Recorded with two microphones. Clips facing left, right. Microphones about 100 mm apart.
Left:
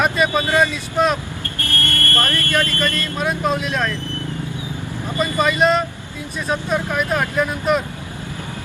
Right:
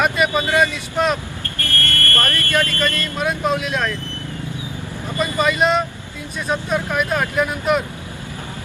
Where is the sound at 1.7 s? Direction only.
20° left (ahead or behind).